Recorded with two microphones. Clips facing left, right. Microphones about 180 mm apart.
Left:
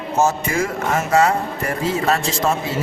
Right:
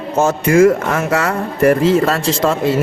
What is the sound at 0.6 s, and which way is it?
Speech, 65° right (ahead or behind).